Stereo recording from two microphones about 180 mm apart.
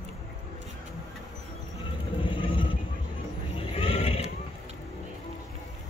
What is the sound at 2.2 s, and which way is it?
Vehicle, 30° left (ahead or behind).